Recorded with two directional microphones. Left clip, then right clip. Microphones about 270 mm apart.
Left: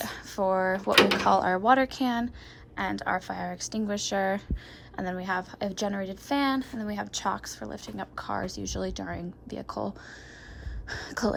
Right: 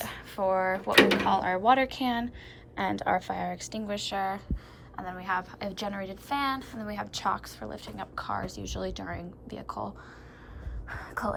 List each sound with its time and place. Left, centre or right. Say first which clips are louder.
0.0 s a sound: left 1 dB; centre
0.9 s speech: even; centre
1.3 s speech: left 2 dB; centre
10.9 s speech: left 3 dB; left